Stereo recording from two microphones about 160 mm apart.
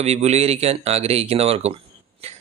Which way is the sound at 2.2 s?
40° right (ahead or behind).